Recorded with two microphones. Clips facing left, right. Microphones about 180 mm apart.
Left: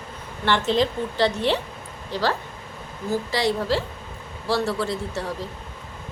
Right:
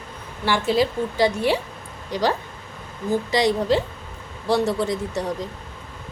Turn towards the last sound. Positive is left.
turn(degrees=-15)  # may be behind; listen again after turning